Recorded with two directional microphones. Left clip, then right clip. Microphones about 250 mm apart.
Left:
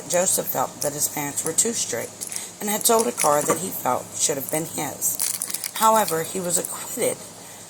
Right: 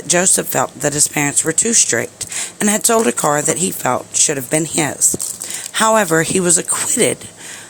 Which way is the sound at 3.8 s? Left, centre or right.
Right.